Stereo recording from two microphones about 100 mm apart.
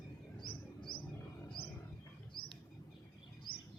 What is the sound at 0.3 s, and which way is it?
Chirp, 55° left (ahead or behind).